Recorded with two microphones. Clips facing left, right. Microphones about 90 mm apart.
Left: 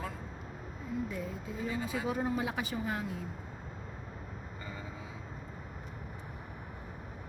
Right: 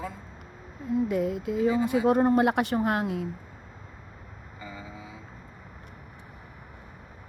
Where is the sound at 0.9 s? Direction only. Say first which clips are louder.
Right 12 dB; 70° right (ahead or behind).